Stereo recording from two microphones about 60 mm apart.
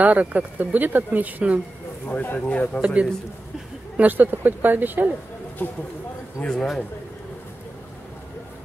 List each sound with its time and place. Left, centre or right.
0.0 s speech: right
2.0 s speech: left
2.8 s speech: centre
5.6 s speech: left
6.5 s speech: centre